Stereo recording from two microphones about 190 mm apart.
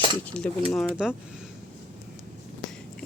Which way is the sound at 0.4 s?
5° left (ahead or behind).